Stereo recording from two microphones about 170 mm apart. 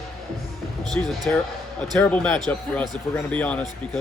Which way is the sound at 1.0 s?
10° left (ahead or behind).